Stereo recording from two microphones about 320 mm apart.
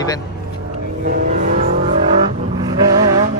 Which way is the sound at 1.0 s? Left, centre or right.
Right.